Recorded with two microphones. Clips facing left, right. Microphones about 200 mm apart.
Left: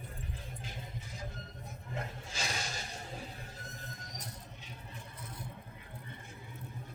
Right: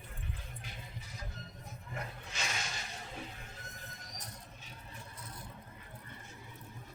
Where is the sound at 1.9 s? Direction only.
30° left (ahead or behind).